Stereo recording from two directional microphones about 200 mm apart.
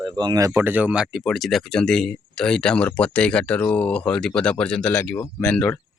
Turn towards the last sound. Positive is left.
turn(degrees=5)  # may be behind; listen again after turning